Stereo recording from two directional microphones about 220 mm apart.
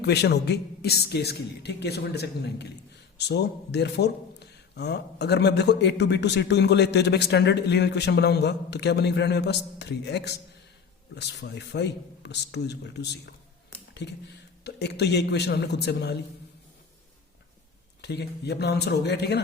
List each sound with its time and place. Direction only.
0.0 s a man's voice: 50° left (ahead or behind)
18.0 s a man's voice: 50° left (ahead or behind)